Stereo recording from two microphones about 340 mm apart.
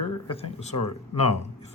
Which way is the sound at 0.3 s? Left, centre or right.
Centre.